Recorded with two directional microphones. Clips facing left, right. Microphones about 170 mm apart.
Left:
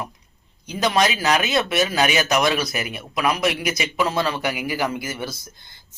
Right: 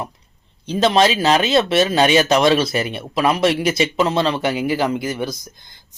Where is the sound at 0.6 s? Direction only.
25° right (ahead or behind).